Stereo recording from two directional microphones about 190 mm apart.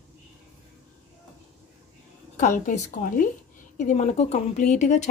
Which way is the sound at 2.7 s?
45° left (ahead or behind).